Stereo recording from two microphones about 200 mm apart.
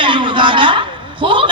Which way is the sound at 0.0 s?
25° right (ahead or behind).